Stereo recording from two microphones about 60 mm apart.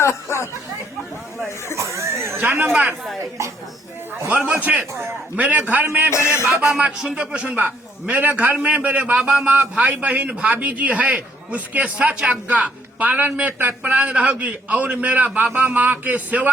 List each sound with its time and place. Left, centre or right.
0.0 s chatter: left
1.7 s a sound: right
2.4 s speech: right
4.3 s a man's voice: right
6.1 s music: left
6.7 s a man's voice: centre
8.1 s a man's voice: right